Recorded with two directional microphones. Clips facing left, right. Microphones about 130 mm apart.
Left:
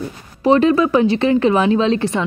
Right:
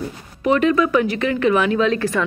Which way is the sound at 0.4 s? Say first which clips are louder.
Left 3 dB; 30° left (ahead or behind).